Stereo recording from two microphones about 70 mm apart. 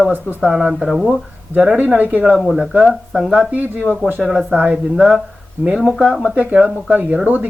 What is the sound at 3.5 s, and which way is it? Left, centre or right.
Speech, right.